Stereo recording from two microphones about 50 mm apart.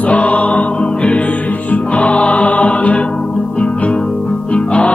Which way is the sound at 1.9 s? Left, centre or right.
Left.